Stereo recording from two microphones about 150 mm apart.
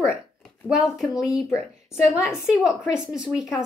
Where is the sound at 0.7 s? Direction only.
5° right (ahead or behind).